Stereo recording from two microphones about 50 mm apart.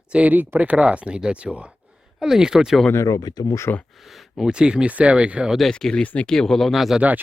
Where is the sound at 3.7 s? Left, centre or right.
Left.